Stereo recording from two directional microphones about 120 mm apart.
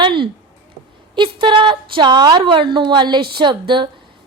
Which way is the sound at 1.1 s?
40° right (ahead or behind).